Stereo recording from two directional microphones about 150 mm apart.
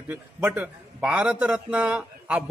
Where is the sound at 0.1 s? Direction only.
10° right (ahead or behind).